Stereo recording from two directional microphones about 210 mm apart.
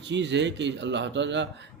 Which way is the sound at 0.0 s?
55° right (ahead or behind).